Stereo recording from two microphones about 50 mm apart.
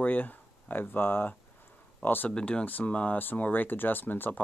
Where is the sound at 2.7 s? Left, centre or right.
Left.